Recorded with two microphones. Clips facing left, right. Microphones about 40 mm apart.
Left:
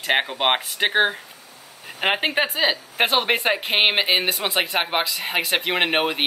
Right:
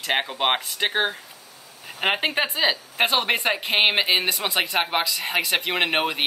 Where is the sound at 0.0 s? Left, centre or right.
Centre.